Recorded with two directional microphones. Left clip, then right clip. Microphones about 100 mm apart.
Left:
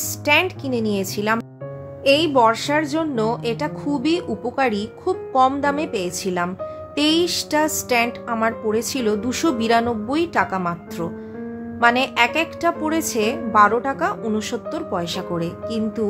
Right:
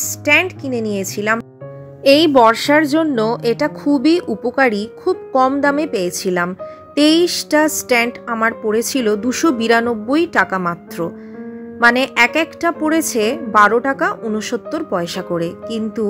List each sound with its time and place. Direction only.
0.0 s a woman's voice: 35° right (ahead or behind)
2.0 s a woman's voice: 75° right (ahead or behind); by 16.1 s 55° right (ahead or behind)